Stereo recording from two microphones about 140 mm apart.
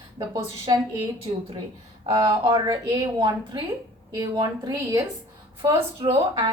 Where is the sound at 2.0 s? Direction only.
35° right (ahead or behind).